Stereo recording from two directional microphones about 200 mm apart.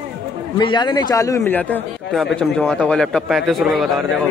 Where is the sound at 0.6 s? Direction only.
20° left (ahead or behind); by 3.9 s centre (ahead or behind).